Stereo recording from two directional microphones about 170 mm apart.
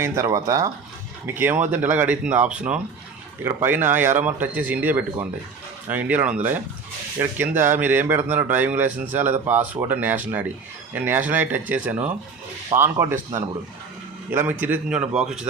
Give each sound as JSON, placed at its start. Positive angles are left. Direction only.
{"t": 0.0, "sound": "speech", "side_deg": -20}